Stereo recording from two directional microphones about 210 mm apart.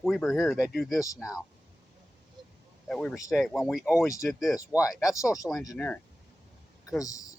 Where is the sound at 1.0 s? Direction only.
15° left (ahead or behind).